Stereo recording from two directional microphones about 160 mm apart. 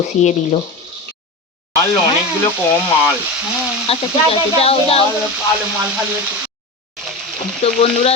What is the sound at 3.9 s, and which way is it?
Speech, 40° left (ahead or behind).